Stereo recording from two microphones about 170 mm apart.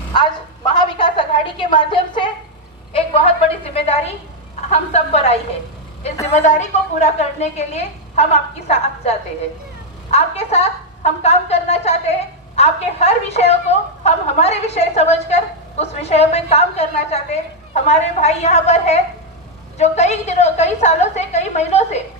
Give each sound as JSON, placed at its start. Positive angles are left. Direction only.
{"t": 0.8, "sound": "a sound", "side_deg": 30}
{"t": 2.9, "sound": "a woman's voice", "side_deg": 35}
{"t": 6.3, "sound": "a woman's voice", "side_deg": 45}